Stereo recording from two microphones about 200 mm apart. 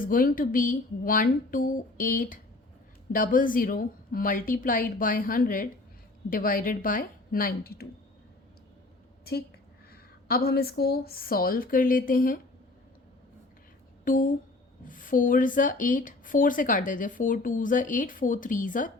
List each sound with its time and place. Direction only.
0.0 s a woman's voice: 45° left (ahead or behind)
9.9 s a woman's voice: 50° left (ahead or behind)
14.0 s speech: 40° left (ahead or behind)